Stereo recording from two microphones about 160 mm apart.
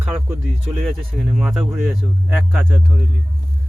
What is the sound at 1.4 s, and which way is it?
Speech, centre (ahead or behind).